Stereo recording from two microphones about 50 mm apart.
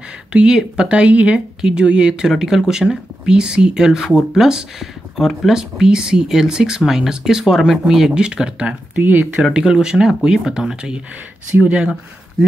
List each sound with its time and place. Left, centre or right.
0.3 s speech: centre
8.9 s speech: right
9.3 s speech: centre